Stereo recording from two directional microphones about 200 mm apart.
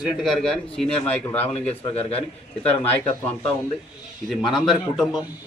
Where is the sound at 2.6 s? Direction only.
10° left (ahead or behind).